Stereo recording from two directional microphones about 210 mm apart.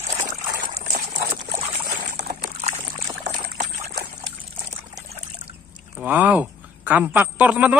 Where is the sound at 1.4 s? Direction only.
40° right (ahead or behind).